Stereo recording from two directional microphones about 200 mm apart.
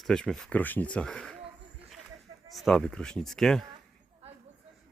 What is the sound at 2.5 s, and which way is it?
Speech, centre (ahead or behind).